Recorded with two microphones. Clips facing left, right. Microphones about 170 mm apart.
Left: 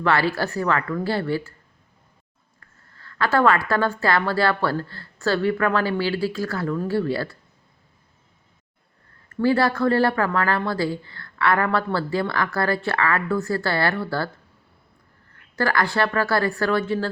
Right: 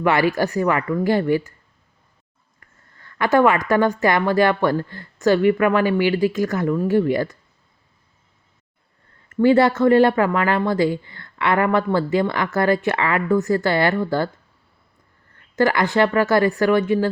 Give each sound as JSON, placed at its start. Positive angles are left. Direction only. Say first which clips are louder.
{"t": 0.0, "sound": "a woman's voice", "louder": "right 3 dB", "side_deg": -15}
{"t": 2.6, "sound": "a woman's voice", "louder": "even", "side_deg": -15}
{"t": 9.3, "sound": "speech", "louder": "right 5 dB", "side_deg": -20}
{"t": 15.5, "sound": "a woman's voice", "louder": "right 5 dB", "side_deg": -20}